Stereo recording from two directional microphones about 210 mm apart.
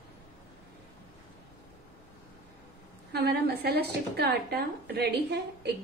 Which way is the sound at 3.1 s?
50° right (ahead or behind).